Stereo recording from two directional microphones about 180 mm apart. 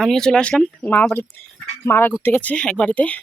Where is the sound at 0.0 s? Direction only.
5° left (ahead or behind).